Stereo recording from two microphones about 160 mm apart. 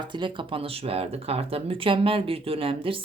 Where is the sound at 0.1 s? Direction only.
30° right (ahead or behind).